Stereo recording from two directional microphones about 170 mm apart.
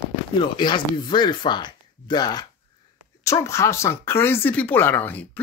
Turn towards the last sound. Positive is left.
turn(degrees=10)  # may be behind; listen again after turning